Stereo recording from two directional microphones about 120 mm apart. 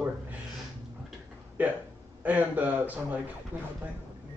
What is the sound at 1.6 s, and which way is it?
Speech, 15° right (ahead or behind).